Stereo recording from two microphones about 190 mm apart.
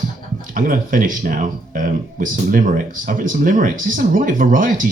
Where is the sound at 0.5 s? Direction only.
45° right (ahead or behind).